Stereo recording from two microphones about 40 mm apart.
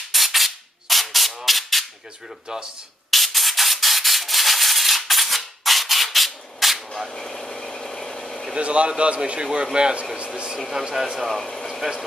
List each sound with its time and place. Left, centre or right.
0.1 s a sound: centre
3.1 s rub: centre
7.1 s vehicle: centre
8.5 s a man's voice: right
10.1 s a sound: right
10.7 s speech: centre